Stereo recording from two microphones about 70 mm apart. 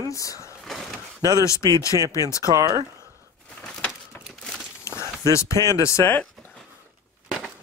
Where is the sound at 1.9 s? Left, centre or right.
Right.